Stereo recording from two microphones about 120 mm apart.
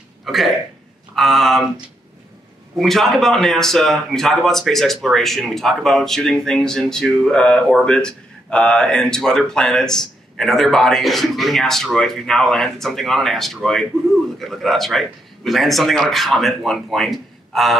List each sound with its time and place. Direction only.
0.2 s a sound: centre (ahead or behind)
1.1 s speech: centre (ahead or behind)
2.8 s speech: centre (ahead or behind)